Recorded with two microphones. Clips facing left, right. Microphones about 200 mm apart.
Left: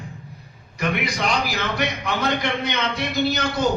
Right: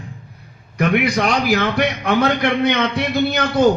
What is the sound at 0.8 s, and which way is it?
A man's voice, 60° right (ahead or behind).